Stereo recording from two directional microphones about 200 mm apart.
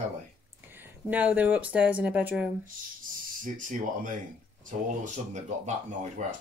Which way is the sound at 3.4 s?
40° right (ahead or behind).